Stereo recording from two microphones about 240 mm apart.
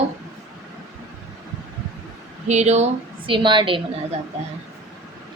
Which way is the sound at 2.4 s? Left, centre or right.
Right.